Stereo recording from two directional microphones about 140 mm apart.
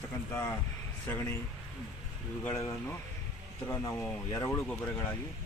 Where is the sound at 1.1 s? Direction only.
20° left (ahead or behind).